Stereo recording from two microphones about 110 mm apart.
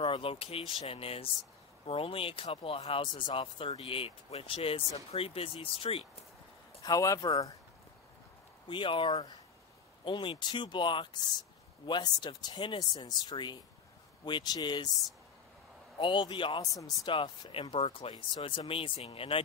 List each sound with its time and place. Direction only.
0.0 s speech: 55° left (ahead or behind)
6.8 s speech: 30° left (ahead or behind)
8.6 s speech: 50° left (ahead or behind)
16.0 s speech: 45° left (ahead or behind)
18.1 s speech: 45° left (ahead or behind)